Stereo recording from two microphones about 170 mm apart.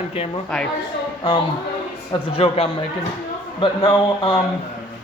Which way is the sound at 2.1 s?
30° left (ahead or behind).